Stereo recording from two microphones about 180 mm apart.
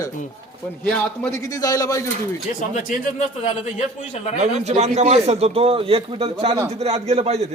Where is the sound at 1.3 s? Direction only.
20° left (ahead or behind).